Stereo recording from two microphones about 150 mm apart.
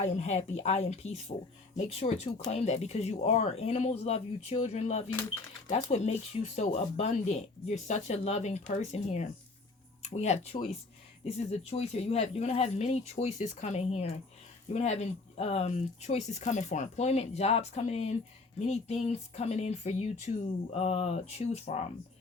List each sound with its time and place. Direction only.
0.1 s speech: 45° left (ahead or behind)